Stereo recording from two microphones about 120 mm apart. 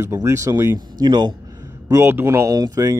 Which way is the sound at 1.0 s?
40° right (ahead or behind).